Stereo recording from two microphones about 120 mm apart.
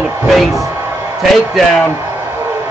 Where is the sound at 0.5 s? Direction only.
25° right (ahead or behind).